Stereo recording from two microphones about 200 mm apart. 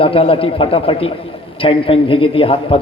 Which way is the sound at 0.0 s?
25° left (ahead or behind).